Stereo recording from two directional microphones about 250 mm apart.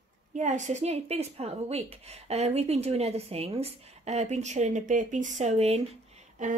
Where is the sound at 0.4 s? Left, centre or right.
Right.